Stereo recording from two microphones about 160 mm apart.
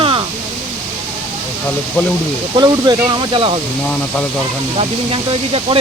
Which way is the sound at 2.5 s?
25° right (ahead or behind).